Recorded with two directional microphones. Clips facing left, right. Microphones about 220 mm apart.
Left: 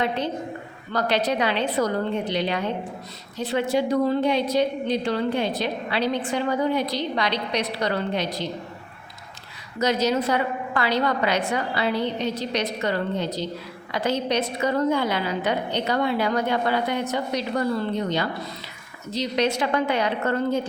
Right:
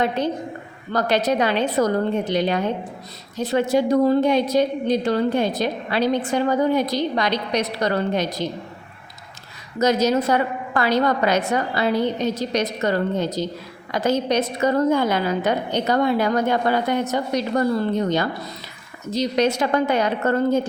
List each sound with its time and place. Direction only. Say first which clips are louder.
0.9 s a woman's voice: right 3 dB; 45° right (ahead or behind)
9.7 s a woman's voice: right 4 dB; 45° right (ahead or behind)